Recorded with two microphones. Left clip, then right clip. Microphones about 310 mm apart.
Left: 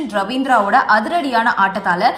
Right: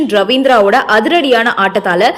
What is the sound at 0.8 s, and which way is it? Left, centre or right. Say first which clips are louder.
Speech: right 6 dB; right.